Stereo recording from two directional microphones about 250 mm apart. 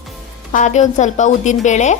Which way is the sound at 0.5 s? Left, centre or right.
Left.